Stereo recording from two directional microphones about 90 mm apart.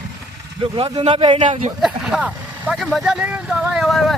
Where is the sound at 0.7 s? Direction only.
65° right (ahead or behind).